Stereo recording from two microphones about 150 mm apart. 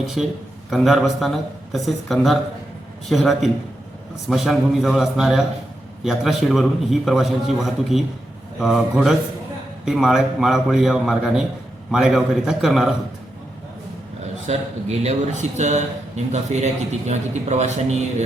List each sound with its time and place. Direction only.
0.0 s a man's voice: centre (ahead or behind)
14.4 s speech: 45° right (ahead or behind)